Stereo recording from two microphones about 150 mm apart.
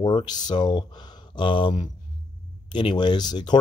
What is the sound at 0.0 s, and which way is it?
A man's voice, 30° left (ahead or behind).